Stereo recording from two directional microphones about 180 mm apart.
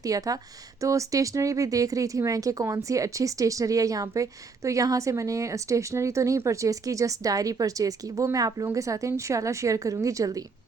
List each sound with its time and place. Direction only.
0.0 s speech: 20° right (ahead or behind)